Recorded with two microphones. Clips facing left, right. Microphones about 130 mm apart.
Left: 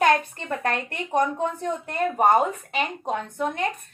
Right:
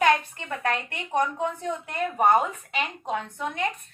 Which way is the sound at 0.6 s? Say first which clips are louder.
Right 1 dB; 40° left (ahead or behind).